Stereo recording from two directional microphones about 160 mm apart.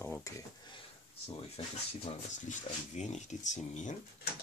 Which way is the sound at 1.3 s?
35° left (ahead or behind).